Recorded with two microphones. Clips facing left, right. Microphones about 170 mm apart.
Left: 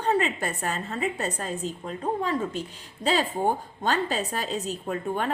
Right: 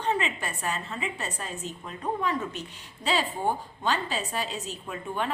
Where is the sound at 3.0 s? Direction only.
45° left (ahead or behind).